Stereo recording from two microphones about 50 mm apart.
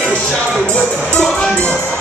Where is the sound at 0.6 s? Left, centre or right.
Centre.